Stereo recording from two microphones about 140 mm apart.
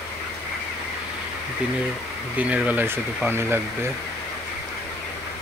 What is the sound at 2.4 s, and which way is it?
Speech, 10° right (ahead or behind).